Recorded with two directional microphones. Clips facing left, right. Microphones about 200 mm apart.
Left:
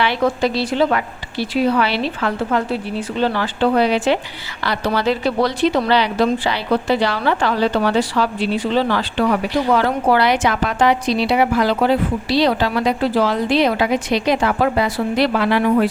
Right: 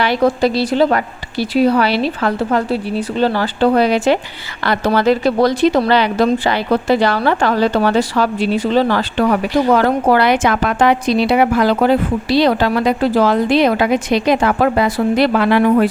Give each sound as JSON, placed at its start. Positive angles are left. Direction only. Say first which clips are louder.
{"t": 0.0, "sound": "a woman's voice", "louder": "right 4 dB", "side_deg": -40}